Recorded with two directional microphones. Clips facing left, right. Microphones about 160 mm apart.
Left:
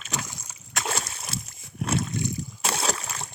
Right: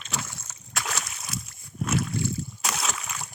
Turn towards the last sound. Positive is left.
turn(degrees=35)  # may be behind; listen again after turning